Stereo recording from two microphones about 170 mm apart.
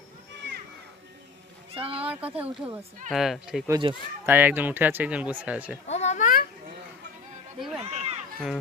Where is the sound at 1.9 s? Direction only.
10° right (ahead or behind).